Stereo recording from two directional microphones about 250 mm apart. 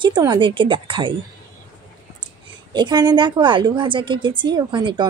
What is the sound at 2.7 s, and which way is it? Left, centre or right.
A woman's voice, centre.